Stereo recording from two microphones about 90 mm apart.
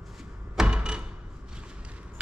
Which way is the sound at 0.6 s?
10° right (ahead or behind).